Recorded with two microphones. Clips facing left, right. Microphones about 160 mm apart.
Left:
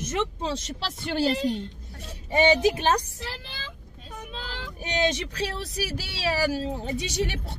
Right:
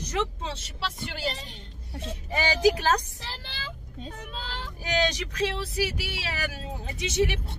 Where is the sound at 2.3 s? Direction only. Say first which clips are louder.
Left 3 dB; 25° left (ahead or behind).